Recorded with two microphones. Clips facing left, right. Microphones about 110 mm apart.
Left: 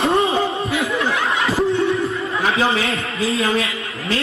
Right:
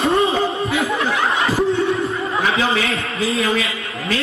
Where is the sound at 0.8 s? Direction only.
30° right (ahead or behind).